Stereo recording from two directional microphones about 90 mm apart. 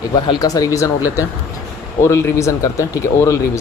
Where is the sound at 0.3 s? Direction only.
40° left (ahead or behind).